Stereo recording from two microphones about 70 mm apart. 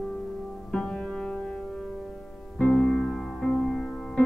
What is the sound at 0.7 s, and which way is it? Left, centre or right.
Music, centre.